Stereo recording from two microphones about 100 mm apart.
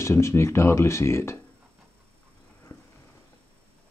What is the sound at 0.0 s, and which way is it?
Speech, 30° left (ahead or behind).